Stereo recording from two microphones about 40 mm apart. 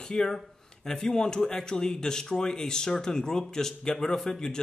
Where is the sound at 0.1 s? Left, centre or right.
Centre.